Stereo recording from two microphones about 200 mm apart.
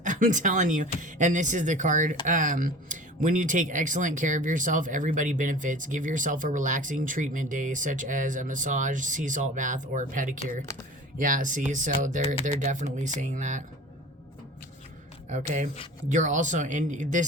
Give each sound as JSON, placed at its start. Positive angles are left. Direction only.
{"t": 0.0, "sound": "speech", "side_deg": -40}
{"t": 15.3, "sound": "speech", "side_deg": -40}